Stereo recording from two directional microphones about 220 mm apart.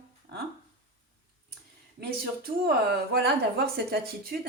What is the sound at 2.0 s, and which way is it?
Speech, 45° right (ahead or behind).